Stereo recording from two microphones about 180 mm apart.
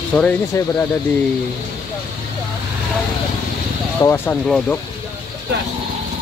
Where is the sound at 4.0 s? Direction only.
15° left (ahead or behind).